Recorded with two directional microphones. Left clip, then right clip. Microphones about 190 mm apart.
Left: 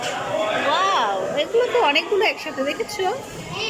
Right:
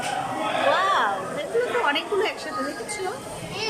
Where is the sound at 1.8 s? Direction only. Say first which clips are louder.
Left 5 dB; 5° left (ahead or behind).